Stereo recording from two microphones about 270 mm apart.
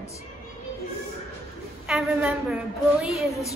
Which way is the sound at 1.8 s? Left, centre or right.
Centre.